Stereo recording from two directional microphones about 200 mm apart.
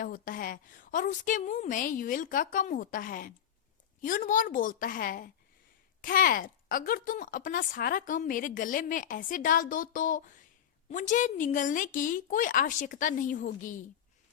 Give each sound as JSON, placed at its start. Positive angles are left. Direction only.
{"t": 0.0, "sound": "a woman's voice", "side_deg": 45}